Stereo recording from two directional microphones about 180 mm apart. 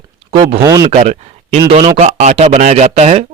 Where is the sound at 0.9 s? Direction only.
35° right (ahead or behind).